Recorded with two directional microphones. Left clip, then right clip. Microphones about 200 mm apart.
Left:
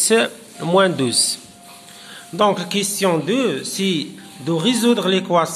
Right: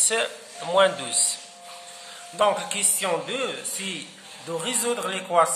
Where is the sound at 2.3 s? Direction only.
45° left (ahead or behind).